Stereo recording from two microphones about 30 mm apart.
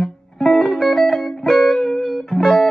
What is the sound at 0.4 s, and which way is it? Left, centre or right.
Music, centre.